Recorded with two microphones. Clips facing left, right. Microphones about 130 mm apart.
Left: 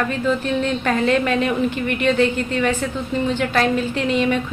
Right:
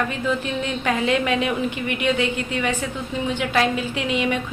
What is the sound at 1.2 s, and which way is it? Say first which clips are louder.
A woman's voice: left 3 dB; 15° right (ahead or behind).